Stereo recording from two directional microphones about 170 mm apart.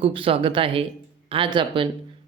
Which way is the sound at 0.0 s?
30° right (ahead or behind).